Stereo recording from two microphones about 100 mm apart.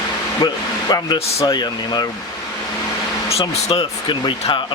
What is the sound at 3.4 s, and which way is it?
Speech, 75° left (ahead or behind).